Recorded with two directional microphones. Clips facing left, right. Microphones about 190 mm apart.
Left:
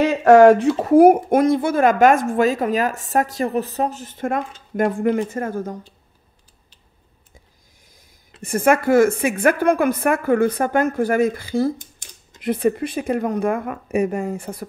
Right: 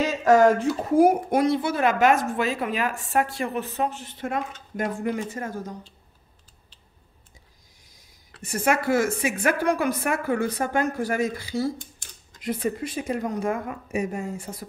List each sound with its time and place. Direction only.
0.0 s speech: 60° left (ahead or behind)
8.4 s a woman's voice: 50° left (ahead or behind)